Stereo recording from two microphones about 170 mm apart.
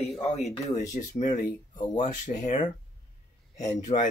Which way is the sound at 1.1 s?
45° left (ahead or behind).